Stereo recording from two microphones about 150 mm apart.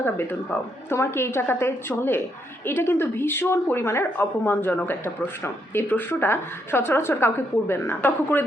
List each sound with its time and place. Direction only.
0.0 s speech: 15° left (ahead or behind)